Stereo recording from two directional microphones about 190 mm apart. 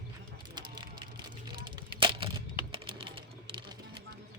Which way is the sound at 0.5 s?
25° right (ahead or behind).